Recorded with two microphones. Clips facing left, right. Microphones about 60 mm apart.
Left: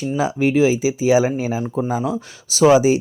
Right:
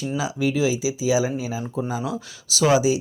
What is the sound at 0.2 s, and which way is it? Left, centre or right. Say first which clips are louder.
Speech: left 7 dB; left.